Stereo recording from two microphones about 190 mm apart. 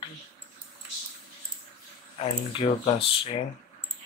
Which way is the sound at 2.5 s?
30° left (ahead or behind).